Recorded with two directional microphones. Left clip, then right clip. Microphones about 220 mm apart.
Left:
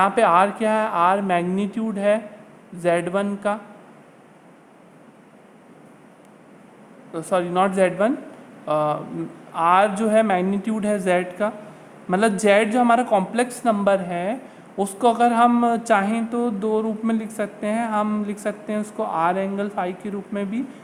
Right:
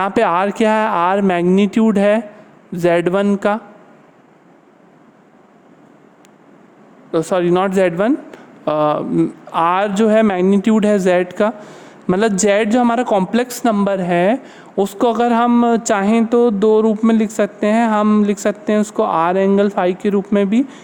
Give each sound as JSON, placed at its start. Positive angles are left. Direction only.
{"t": 0.0, "sound": "a woman's voice", "side_deg": -45}
{"t": 7.1, "sound": "a woman's voice", "side_deg": -40}